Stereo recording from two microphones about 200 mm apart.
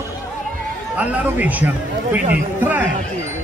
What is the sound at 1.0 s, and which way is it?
A man's voice, 5° right (ahead or behind).